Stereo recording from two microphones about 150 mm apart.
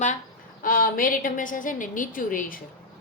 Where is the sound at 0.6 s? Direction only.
70° left (ahead or behind).